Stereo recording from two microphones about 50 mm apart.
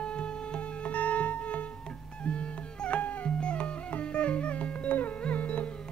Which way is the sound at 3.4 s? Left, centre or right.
Left.